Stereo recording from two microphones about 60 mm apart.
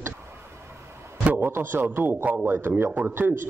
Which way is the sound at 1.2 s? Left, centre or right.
Right.